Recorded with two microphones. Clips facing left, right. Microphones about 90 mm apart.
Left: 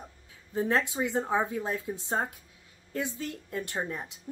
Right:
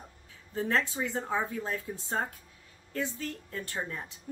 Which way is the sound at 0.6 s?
15° left (ahead or behind).